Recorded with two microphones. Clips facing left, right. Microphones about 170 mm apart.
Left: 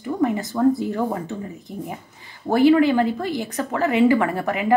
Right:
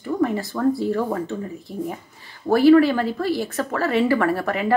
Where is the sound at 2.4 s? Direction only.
20° left (ahead or behind).